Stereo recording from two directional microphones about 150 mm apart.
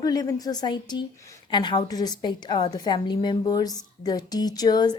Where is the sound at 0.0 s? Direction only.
25° left (ahead or behind).